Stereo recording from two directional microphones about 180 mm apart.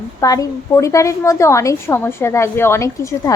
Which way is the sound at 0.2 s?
20° left (ahead or behind).